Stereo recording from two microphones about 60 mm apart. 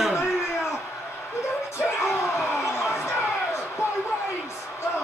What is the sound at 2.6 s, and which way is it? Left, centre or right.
Crowd, left.